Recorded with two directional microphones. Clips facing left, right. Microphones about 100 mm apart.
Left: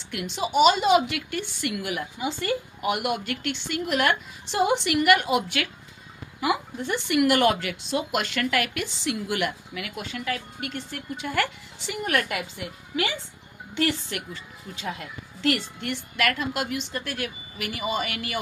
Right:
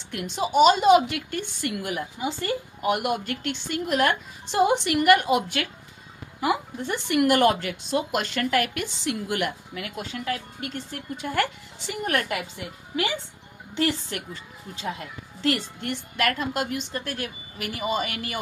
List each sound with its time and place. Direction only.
0.1 s a woman's voice: 40° right (ahead or behind)
14.1 s a woman's voice: 35° right (ahead or behind)
15.4 s a woman's voice: 35° right (ahead or behind)